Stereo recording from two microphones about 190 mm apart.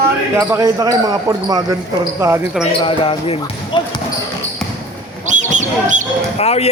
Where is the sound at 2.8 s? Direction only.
30° left (ahead or behind).